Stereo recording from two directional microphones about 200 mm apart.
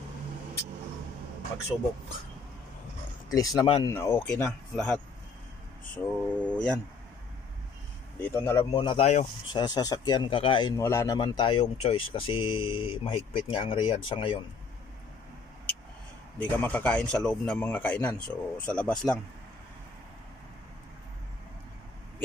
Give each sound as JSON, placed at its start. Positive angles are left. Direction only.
{"t": 3.3, "sound": "speech", "side_deg": 20}
{"t": 8.2, "sound": "speech", "side_deg": 10}
{"t": 10.8, "sound": "speech", "side_deg": 15}
{"t": 16.3, "sound": "speech", "side_deg": 10}